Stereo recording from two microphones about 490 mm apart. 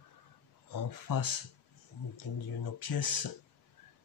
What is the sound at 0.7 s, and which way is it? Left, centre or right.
Speech, left.